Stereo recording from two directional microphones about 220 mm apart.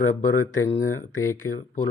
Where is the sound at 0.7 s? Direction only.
10° left (ahead or behind).